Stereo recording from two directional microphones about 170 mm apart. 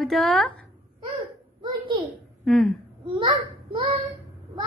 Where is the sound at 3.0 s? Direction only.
30° right (ahead or behind).